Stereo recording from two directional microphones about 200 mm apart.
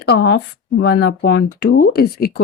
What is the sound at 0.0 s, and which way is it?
Speech, 55° left (ahead or behind).